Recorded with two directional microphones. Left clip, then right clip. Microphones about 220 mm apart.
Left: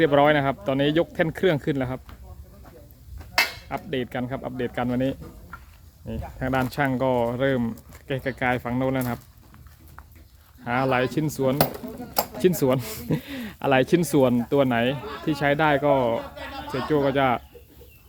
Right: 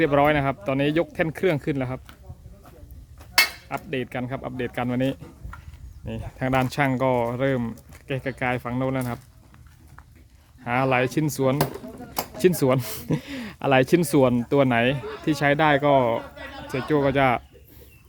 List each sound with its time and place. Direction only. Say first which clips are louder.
0.0 s speech: left 1 dB; 5° right (ahead or behind)
3.7 s speech: even; 5° right (ahead or behind)
5.5 s a sound: left 2 dB; 45° right (ahead or behind)
6.1 s speech: right 2 dB; 20° right (ahead or behind); by 9.2 s 5° right (ahead or behind)
10.6 s speech: right 1 dB; 15° right (ahead or behind)
16.2 s chatter: left 3 dB; 50° left (ahead or behind)
16.9 s speech: right 1 dB; 20° right (ahead or behind)